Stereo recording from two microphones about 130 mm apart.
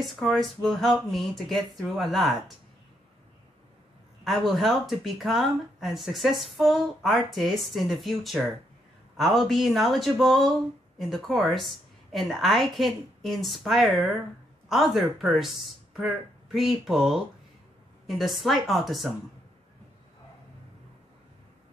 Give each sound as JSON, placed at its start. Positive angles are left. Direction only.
{"t": 0.0, "sound": "speech", "side_deg": 0}
{"t": 4.2, "sound": "speech", "side_deg": 0}
{"t": 16.5, "sound": "speech", "side_deg": 0}